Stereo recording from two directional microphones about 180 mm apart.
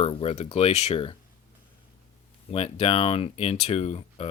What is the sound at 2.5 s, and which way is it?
Speech, 30° left (ahead or behind).